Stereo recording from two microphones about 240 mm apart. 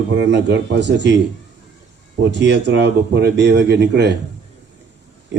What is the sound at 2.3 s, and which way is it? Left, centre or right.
Speech, right.